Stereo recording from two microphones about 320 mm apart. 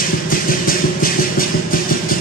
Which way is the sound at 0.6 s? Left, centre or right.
Left.